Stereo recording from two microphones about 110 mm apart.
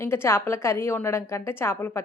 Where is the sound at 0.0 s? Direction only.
25° left (ahead or behind).